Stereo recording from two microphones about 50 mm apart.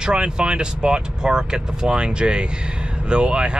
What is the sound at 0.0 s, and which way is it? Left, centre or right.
Speech, centre.